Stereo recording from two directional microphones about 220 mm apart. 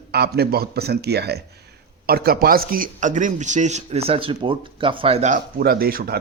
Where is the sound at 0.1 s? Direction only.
45° right (ahead or behind).